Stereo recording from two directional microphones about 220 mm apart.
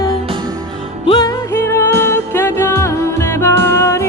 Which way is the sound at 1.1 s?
15° left (ahead or behind).